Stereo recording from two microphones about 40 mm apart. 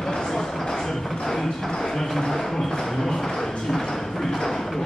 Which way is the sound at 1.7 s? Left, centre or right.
Centre.